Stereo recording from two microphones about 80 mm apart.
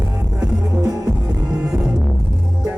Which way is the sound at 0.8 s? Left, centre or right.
Right.